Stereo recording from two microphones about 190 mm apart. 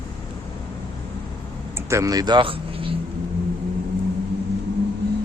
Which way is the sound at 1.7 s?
15° right (ahead or behind).